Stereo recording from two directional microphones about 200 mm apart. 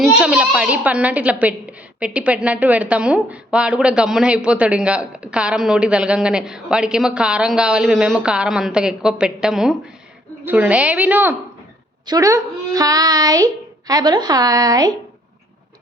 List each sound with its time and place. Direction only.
0.0 s a woman's voice: 5° right (ahead or behind)